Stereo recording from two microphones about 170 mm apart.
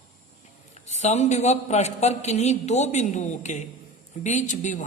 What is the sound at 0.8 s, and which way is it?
A woman's voice, 40° left (ahead or behind).